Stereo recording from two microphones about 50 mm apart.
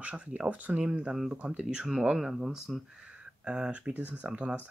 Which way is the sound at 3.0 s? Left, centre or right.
Right.